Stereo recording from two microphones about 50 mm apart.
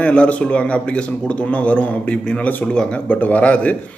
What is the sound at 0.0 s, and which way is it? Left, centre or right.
A man's voice, left.